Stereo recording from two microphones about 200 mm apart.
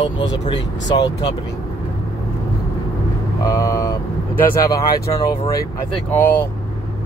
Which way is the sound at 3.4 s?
15° left (ahead or behind).